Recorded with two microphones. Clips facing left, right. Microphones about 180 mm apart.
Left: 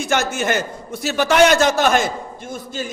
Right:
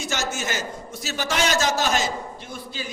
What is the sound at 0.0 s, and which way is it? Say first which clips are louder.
A man's voice: left 8 dB; 55° left (ahead or behind).